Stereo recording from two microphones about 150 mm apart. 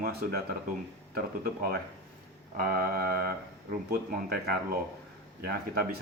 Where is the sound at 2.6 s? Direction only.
75° right (ahead or behind).